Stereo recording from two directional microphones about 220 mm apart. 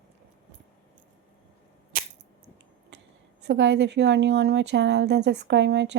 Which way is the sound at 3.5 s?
50° right (ahead or behind).